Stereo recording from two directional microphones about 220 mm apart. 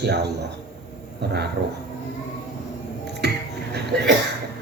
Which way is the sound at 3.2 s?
50° right (ahead or behind).